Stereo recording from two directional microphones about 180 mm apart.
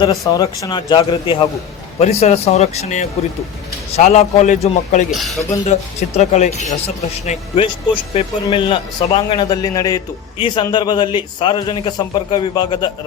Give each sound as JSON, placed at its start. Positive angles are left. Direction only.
{"t": 0.0, "sound": "a man's voice", "side_deg": 20}